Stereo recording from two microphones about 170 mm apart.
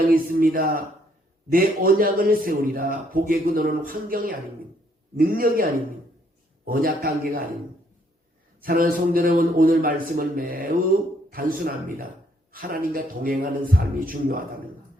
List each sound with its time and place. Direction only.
0.0 s a man's voice: 55° right (ahead or behind)
8.6 s a man's voice: 55° right (ahead or behind)